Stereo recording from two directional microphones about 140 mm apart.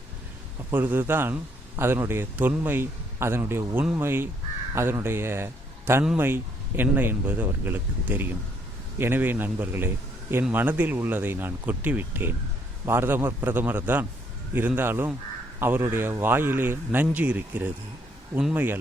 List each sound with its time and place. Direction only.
0.7 s speech: 15° right (ahead or behind)